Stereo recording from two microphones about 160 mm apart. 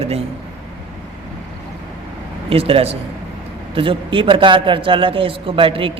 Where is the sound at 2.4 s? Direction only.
35° right (ahead or behind).